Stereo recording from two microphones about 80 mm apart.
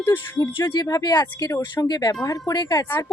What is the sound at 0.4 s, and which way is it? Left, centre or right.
A woman's voice, left.